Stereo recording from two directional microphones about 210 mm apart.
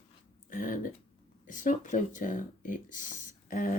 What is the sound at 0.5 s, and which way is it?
Speech, 40° left (ahead or behind).